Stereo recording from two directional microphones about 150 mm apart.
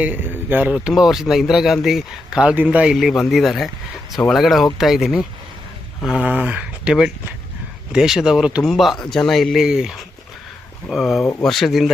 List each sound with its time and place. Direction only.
0.0 s a man's voice: 10° right (ahead or behind)